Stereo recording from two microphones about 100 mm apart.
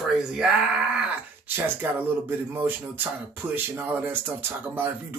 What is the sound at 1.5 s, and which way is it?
Speech, 20° right (ahead or behind).